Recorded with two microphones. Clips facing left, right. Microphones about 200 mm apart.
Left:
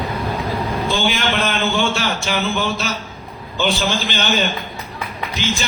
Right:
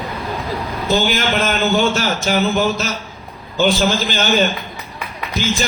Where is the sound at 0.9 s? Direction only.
40° right (ahead or behind).